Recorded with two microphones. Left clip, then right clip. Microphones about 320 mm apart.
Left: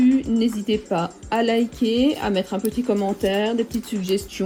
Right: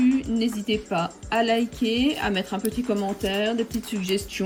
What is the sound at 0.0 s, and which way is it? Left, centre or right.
Music, centre.